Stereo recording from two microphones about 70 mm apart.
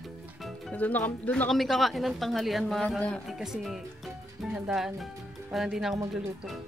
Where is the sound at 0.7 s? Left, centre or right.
Left.